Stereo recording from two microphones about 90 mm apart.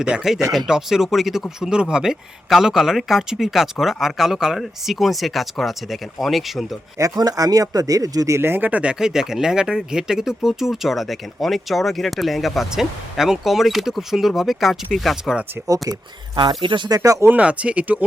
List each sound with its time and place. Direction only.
0.0 s speech: 10° right (ahead or behind)
7.0 s speech: 45° right (ahead or behind)
8.4 s speech: 25° right (ahead or behind); by 15.4 s 5° right (ahead or behind)
15.9 s speech: 50° right (ahead or behind)
17.0 s speech: 40° right (ahead or behind)
17.2 s speech: 15° right (ahead or behind)